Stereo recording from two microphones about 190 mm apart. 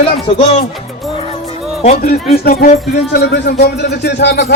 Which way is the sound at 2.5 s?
50° left (ahead or behind).